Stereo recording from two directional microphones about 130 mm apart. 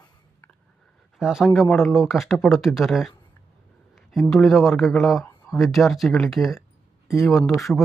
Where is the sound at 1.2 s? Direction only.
5° right (ahead or behind).